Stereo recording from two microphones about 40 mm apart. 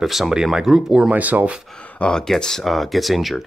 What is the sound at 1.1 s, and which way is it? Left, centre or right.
Speech, right.